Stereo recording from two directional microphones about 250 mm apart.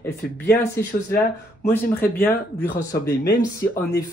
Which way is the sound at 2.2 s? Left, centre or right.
Centre.